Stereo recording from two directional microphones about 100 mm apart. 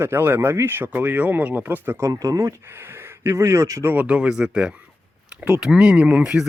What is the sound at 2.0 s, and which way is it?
Speech, 35° right (ahead or behind).